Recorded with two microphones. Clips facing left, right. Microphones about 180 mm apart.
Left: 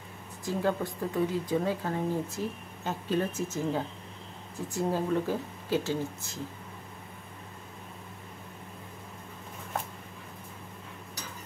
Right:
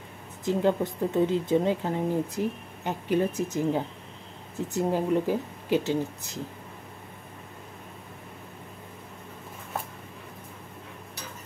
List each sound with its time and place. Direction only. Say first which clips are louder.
0.5 s speech: right 5 dB; 20° right (ahead or behind)